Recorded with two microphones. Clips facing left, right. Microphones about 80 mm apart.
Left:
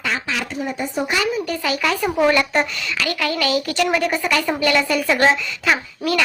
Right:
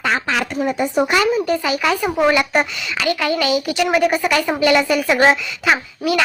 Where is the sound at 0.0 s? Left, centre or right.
Right.